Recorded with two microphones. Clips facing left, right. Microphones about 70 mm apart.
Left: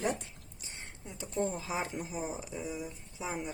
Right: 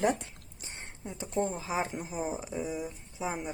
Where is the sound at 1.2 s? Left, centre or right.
Right.